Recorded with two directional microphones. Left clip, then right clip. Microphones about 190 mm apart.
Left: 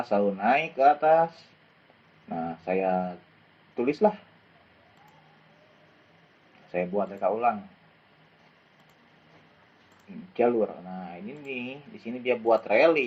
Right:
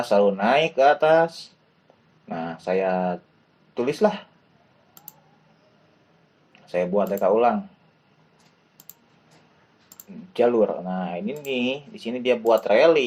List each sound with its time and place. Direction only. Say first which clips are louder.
0.0 s speech: right 6 dB; 25° right (ahead or behind)
2.3 s speech: right 4 dB; 25° right (ahead or behind)
6.7 s speech: right 6 dB; 25° right (ahead or behind)
10.3 s speech: right 5 dB; 25° right (ahead or behind)